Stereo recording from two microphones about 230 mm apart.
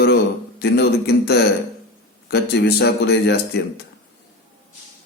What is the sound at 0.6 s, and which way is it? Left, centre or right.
A man's voice, left.